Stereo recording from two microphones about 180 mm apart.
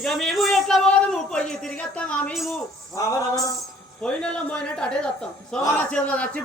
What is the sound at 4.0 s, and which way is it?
A man's voice, 5° left (ahead or behind).